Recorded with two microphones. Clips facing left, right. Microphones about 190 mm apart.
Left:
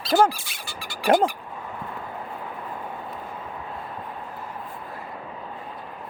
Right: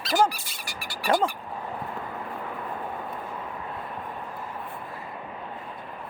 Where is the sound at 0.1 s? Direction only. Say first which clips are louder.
Left 4 dB; 75° left (ahead or behind).